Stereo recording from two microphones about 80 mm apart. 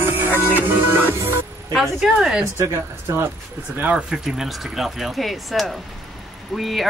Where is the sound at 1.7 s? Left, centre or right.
Centre.